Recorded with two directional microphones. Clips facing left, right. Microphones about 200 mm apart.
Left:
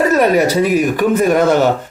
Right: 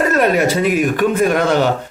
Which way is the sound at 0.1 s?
5° left (ahead or behind).